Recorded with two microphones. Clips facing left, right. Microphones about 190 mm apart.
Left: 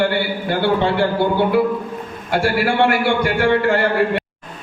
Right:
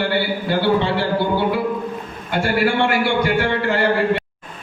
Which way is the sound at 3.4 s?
55° left (ahead or behind).